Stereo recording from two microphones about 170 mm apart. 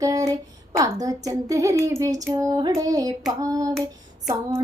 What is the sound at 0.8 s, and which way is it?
A woman's voice, 20° right (ahead or behind).